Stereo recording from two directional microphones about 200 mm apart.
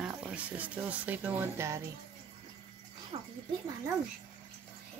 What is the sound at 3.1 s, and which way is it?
Speech, 30° right (ahead or behind).